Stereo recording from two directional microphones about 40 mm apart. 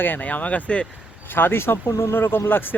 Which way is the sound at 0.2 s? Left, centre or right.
Left.